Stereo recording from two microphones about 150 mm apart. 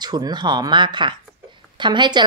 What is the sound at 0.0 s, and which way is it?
A woman's voice, 30° right (ahead or behind).